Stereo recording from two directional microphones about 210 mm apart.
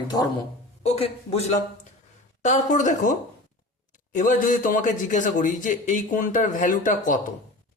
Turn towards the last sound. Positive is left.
turn(degrees=40)  # may be behind; listen again after turning